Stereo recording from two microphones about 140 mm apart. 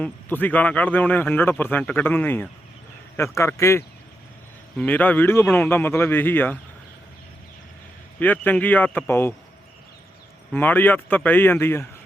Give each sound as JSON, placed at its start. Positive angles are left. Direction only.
{"t": 0.0, "sound": "a man's voice", "side_deg": 15}
{"t": 8.2, "sound": "a man's voice", "side_deg": 10}
{"t": 10.5, "sound": "a man's voice", "side_deg": 15}